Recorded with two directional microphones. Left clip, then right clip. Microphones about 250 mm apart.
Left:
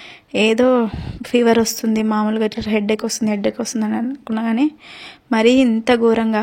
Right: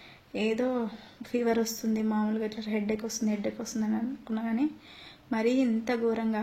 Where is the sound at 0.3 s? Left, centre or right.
Left.